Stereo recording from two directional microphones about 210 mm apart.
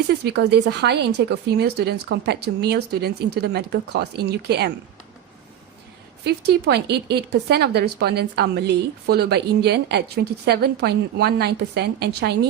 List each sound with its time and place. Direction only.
0.1 s speech: 55° right (ahead or behind)
6.2 s speech: 50° right (ahead or behind)